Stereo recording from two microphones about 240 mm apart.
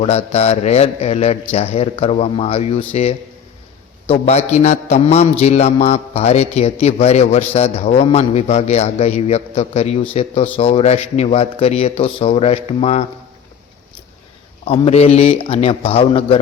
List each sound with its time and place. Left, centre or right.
0.0 s a man's voice: left
14.7 s a man's voice: left